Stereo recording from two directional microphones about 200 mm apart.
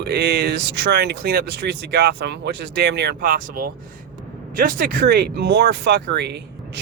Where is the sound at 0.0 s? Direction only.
50° right (ahead or behind).